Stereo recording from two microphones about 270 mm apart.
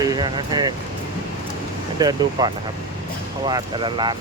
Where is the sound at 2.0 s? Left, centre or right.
Centre.